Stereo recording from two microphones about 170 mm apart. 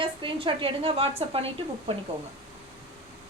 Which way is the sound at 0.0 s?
30° right (ahead or behind).